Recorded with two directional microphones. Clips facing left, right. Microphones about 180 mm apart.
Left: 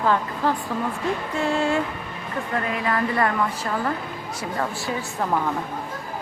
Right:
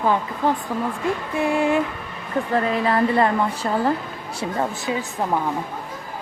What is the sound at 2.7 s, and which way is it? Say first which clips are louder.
A woman's voice: right 4 dB; 30° right (ahead or behind).